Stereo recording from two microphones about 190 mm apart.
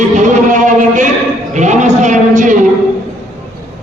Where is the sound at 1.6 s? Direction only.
40° right (ahead or behind).